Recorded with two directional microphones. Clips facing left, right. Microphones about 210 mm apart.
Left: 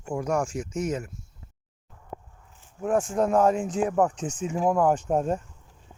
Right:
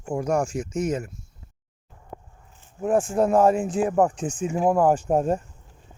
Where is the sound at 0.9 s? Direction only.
45° right (ahead or behind).